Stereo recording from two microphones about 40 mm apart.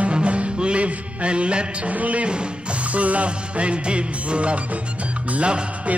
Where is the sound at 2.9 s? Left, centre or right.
Right.